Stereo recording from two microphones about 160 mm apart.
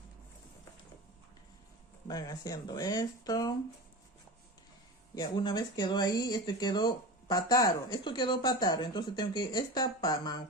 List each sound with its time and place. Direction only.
2.0 s speech: 25° left (ahead or behind)
5.1 s speech: 25° left (ahead or behind)